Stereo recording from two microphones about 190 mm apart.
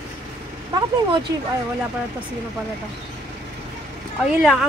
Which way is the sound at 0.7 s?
20° right (ahead or behind).